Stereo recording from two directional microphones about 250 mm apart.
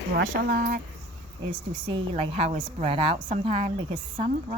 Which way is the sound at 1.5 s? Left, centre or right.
Right.